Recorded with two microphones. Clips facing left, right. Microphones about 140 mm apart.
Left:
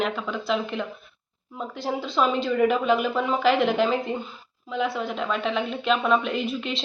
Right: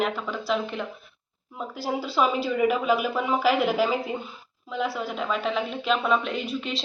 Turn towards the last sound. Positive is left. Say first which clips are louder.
# left 2 dB
turn(degrees=0)  # may be behind; listen again after turning